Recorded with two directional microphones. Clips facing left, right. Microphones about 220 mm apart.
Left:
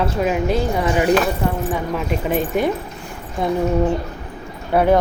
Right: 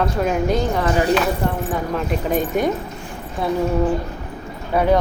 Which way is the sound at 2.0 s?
Centre (ahead or behind).